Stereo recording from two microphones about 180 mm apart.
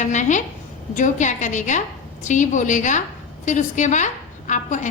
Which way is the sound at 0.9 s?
45° left (ahead or behind).